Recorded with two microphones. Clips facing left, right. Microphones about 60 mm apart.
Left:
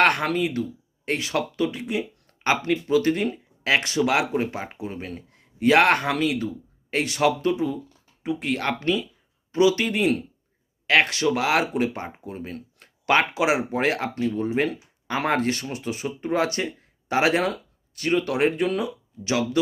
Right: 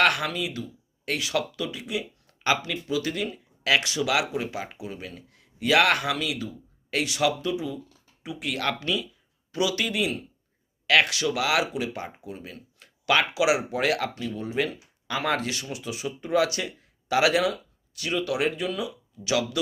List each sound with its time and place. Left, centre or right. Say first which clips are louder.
0.0 s speech: left 3 dB; left